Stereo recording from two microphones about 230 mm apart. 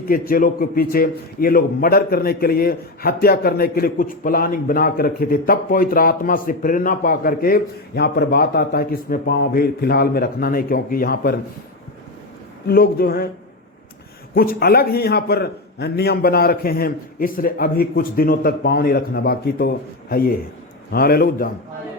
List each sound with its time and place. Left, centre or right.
0.1 s a man's voice: left
12.6 s a man's voice: left
14.3 s a man's voice: left